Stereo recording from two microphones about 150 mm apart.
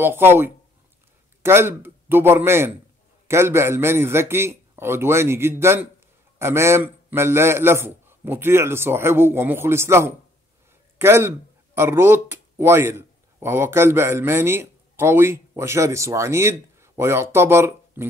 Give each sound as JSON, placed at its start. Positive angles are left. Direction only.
{"t": 0.0, "sound": "a man's voice", "side_deg": -15}